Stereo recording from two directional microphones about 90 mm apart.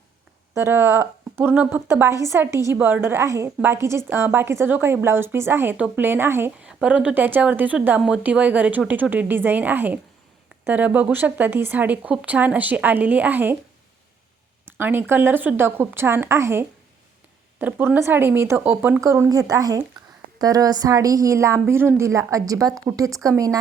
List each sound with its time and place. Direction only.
0.5 s a woman's voice: 25° right (ahead or behind)
6.6 s a woman's voice: 10° right (ahead or behind)
14.8 s a woman's voice: 25° right (ahead or behind)